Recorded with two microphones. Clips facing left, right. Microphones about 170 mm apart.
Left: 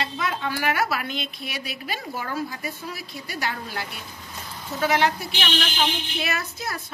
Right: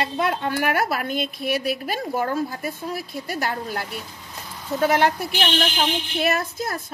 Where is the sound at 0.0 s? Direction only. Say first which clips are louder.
Right 5 dB; 55° right (ahead or behind).